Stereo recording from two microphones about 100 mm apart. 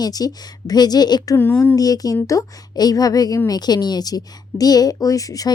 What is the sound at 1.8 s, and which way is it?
A woman's voice, 40° left (ahead or behind).